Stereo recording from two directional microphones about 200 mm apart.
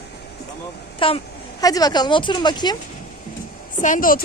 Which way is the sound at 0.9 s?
25° left (ahead or behind).